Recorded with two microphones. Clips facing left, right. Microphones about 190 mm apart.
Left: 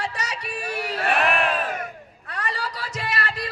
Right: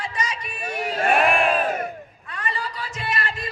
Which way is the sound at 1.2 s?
30° right (ahead or behind).